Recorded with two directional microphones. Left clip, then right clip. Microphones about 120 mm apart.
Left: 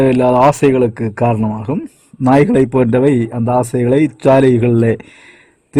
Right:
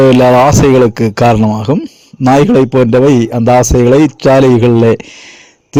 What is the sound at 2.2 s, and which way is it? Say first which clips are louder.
Speech: right 4 dB; 25° right (ahead or behind).